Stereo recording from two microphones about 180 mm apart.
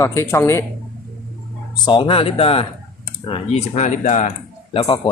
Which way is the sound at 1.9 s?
30° left (ahead or behind).